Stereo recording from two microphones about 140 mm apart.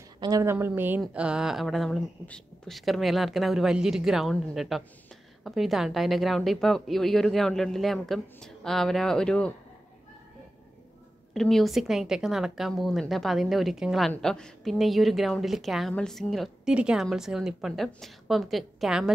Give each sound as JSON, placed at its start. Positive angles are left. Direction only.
{"t": 0.2, "sound": "a woman's voice", "side_deg": -25}
{"t": 11.3, "sound": "a woman's voice", "side_deg": 0}